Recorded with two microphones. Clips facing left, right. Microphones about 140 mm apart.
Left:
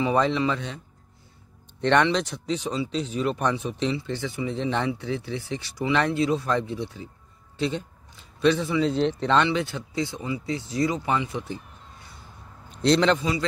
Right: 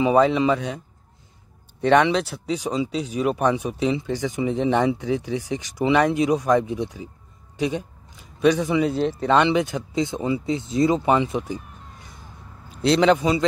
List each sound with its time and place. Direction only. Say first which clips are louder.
0.0 s speech: right 5 dB; 10° right (ahead or behind)
1.8 s a man's voice: right 3 dB; 10° right (ahead or behind)
12.6 s a man's voice: right 3 dB; 5° right (ahead or behind)
13.2 s speech: right 6 dB; 20° right (ahead or behind)